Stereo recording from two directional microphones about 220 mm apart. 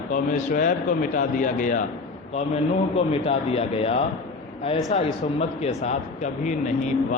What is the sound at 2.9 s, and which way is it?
A man's voice, 25° left (ahead or behind).